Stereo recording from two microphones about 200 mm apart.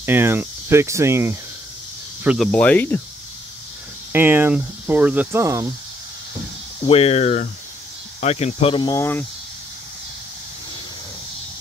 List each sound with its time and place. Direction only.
0.0 s speech: 10° right (ahead or behind)
2.2 s speech: centre (ahead or behind)
4.1 s speech: 10° right (ahead or behind)
6.9 s speech: 30° left (ahead or behind); by 9.2 s 15° left (ahead or behind)